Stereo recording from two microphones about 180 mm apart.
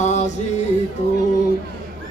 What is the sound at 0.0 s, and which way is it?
Music, 40° left (ahead or behind).